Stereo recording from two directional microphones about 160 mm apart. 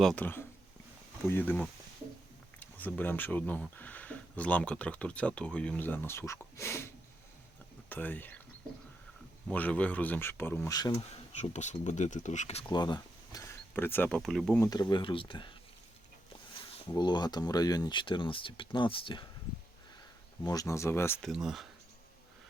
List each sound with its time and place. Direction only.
0.0 s speech: 5° left (ahead or behind)
9.5 s speech: 10° left (ahead or behind)
10.8 s speech: 25° left (ahead or behind)
11.1 s speech: 45° left (ahead or behind)
12.7 s speech: 25° left (ahead or behind)
14.2 s speech: centre (ahead or behind)
14.6 s speech: 25° left (ahead or behind)
16.6 s speech: 30° left (ahead or behind)
20.4 s speech: 25° left (ahead or behind)
21.2 s speech: centre (ahead or behind)